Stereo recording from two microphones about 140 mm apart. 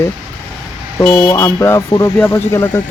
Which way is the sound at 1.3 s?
20° left (ahead or behind).